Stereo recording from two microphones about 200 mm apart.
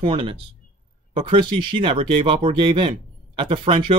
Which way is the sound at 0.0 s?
25° right (ahead or behind).